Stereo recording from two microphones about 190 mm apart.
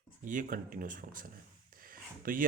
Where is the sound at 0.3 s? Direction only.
45° right (ahead or behind).